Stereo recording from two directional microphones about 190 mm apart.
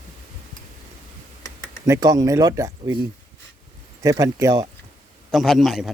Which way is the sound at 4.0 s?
15° right (ahead or behind).